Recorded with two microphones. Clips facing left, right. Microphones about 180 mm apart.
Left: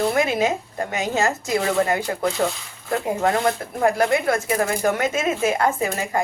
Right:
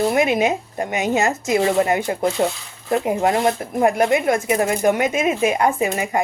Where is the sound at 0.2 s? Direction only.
20° right (ahead or behind).